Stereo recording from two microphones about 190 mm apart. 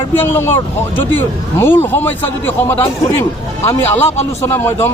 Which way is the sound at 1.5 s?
10° left (ahead or behind).